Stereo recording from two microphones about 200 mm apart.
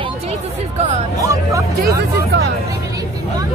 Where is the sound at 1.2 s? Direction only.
15° right (ahead or behind).